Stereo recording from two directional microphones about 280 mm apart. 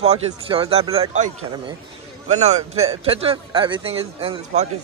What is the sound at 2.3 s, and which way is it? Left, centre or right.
A man's voice, right.